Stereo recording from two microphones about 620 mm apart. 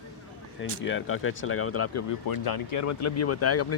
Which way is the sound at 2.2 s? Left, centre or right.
Left.